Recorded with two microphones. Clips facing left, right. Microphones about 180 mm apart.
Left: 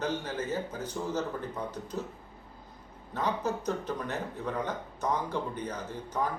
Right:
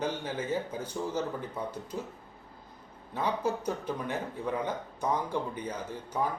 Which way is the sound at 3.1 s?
10° right (ahead or behind).